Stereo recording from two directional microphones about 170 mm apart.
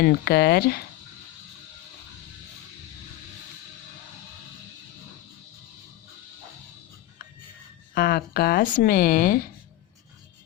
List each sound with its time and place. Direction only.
0.0 s speech: 65° left (ahead or behind)
7.9 s speech: 65° left (ahead or behind)